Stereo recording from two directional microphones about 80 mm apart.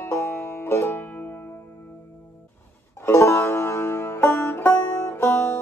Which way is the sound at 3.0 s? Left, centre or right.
Left.